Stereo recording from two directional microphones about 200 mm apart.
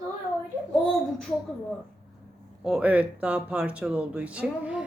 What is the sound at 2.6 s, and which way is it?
Speech, 5° right (ahead or behind).